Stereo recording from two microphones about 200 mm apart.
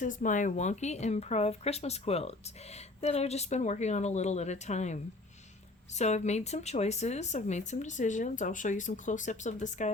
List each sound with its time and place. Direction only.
0.0 s speech: 40° left (ahead or behind)